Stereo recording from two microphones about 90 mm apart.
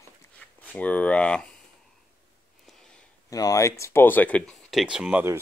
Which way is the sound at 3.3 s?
40° left (ahead or behind).